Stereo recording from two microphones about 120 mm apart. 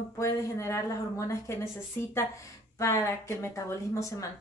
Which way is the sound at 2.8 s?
25° left (ahead or behind).